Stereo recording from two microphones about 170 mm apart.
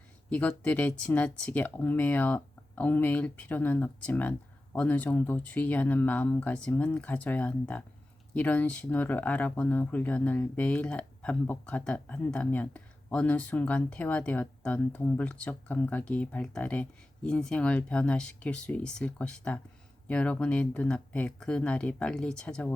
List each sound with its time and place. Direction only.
0.3 s speech: 10° left (ahead or behind)